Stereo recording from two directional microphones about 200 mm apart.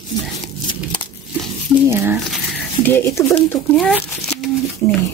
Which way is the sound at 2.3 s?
10° left (ahead or behind).